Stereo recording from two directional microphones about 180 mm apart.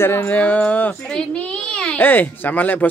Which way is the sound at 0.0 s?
10° left (ahead or behind).